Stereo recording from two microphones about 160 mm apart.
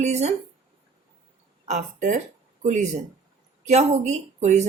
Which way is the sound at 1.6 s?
45° right (ahead or behind).